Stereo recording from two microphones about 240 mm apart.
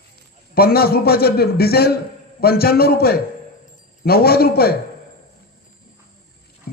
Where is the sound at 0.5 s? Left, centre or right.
Left.